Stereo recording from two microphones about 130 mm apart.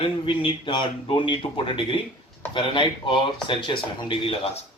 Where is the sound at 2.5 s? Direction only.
40° left (ahead or behind).